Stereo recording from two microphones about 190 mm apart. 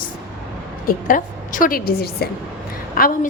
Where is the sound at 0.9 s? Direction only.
45° left (ahead or behind).